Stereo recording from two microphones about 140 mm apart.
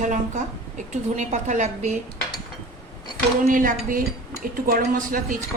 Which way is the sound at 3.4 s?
75° right (ahead or behind).